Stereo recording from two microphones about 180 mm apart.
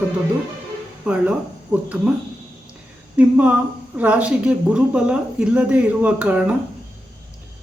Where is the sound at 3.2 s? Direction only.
10° right (ahead or behind).